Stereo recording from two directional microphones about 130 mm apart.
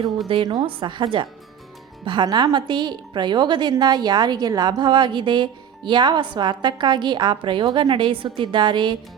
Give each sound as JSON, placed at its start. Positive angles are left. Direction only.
{"t": 0.3, "sound": "a woman's voice", "side_deg": -40}